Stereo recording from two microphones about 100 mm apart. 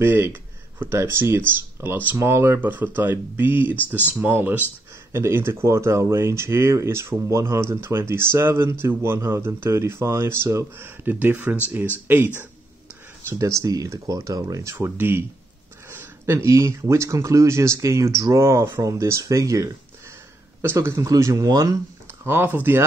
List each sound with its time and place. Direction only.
0.0 s speech: 20° right (ahead or behind)
13.3 s speech: 30° right (ahead or behind)
22.2 s speech: 20° right (ahead or behind)